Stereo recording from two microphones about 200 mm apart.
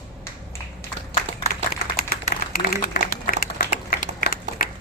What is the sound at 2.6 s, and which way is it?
Applause, 50° left (ahead or behind).